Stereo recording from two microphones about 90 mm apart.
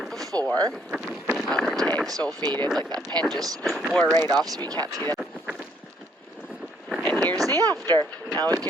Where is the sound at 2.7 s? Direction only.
50° right (ahead or behind).